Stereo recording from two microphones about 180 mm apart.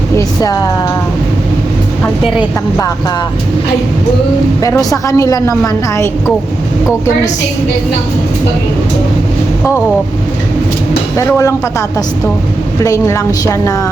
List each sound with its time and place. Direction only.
0.2 s speech: 20° left (ahead or behind)
4.6 s a woman's voice: 20° left (ahead or behind)
11.2 s a woman's voice: 15° left (ahead or behind)
12.8 s a woman's voice: 15° left (ahead or behind)